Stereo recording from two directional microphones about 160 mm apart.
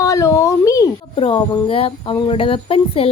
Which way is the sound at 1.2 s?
30° left (ahead or behind).